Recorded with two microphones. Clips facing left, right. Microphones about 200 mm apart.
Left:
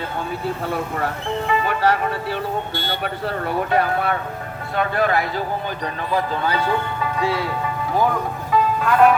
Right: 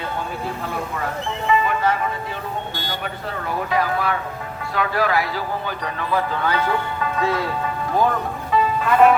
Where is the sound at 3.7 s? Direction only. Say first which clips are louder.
Left 1 dB; 60° left (ahead or behind).